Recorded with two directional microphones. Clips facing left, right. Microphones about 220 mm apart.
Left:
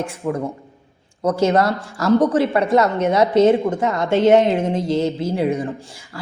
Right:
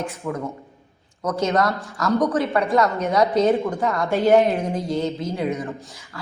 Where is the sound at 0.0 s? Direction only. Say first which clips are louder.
Left 4 dB; 30° left (ahead or behind).